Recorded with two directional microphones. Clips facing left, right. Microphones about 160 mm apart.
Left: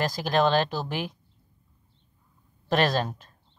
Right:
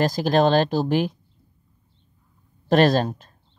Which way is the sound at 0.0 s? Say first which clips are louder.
Right 5 dB; 40° right (ahead or behind).